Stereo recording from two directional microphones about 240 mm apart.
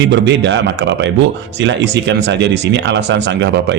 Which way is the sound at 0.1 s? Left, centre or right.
Right.